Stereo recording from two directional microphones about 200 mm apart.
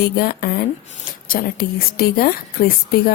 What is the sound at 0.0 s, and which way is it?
A woman's voice, 50° left (ahead or behind).